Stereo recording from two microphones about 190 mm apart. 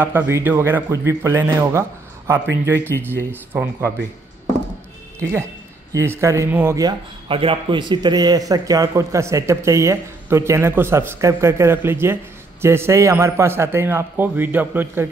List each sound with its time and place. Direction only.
0.0 s a man's voice: 10° right (ahead or behind)
5.9 s a man's voice: 15° right (ahead or behind)